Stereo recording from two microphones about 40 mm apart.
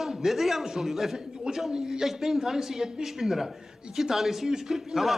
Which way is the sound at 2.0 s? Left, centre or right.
Centre.